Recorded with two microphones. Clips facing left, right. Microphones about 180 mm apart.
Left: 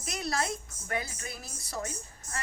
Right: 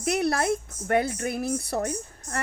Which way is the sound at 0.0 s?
65° right (ahead or behind).